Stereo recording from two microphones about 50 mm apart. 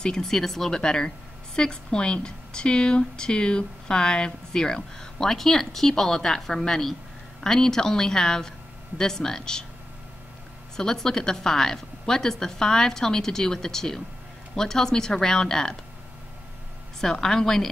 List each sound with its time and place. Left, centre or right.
0.0 s a woman's voice: centre
10.8 s a woman's voice: centre
17.0 s a woman's voice: centre